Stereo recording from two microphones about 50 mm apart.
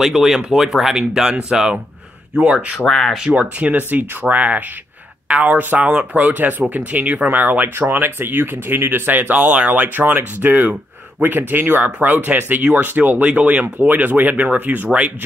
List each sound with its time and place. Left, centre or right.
0.0 s speech: centre
2.9 s speech: centre
3.3 s speech: right
13.2 s speech: centre
13.7 s speech: right